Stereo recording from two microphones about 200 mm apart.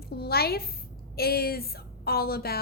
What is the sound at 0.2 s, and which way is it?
A woman's voice, 50° left (ahead or behind).